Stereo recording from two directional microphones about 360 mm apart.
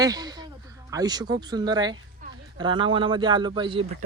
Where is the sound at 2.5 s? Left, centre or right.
Centre.